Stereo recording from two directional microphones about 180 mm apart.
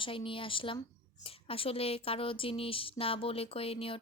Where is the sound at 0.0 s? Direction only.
30° left (ahead or behind).